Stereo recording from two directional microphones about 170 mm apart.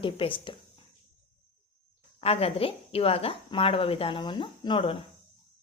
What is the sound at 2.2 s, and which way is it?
A woman's voice, 35° left (ahead or behind).